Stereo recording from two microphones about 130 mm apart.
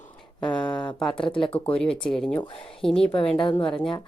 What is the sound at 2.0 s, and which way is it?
A woman's voice, 5° left (ahead or behind).